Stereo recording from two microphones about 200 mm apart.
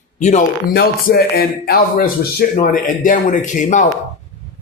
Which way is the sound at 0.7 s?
55° left (ahead or behind).